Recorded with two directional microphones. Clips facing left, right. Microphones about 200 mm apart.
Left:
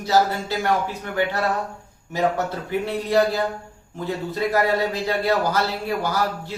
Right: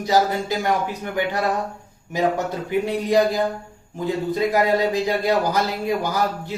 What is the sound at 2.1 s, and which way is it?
A man's voice, 15° right (ahead or behind).